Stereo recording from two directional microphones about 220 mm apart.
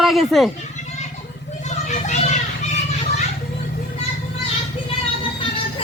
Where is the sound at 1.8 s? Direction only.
35° left (ahead or behind).